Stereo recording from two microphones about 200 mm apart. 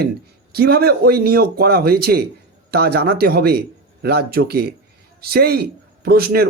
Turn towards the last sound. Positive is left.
turn(degrees=-50)  # may be behind; listen again after turning